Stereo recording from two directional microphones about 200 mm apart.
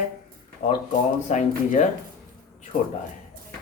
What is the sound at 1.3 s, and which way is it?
Speech, 35° left (ahead or behind).